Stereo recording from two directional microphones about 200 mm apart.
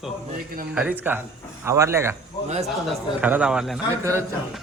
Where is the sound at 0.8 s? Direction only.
10° right (ahead or behind).